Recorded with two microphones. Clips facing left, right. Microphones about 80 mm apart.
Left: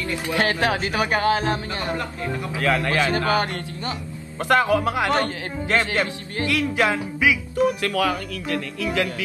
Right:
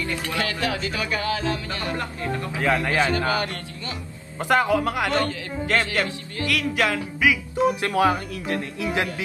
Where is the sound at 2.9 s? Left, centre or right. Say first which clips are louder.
Even; right.